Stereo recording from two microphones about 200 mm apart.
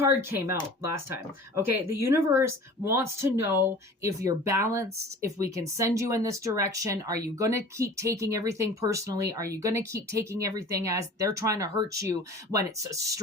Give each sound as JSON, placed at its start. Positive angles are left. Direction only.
{"t": 0.0, "sound": "speech", "side_deg": -10}
{"t": 1.5, "sound": "speech", "side_deg": -15}